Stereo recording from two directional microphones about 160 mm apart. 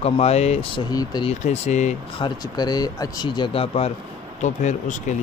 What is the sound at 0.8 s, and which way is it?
Speech, 25° left (ahead or behind).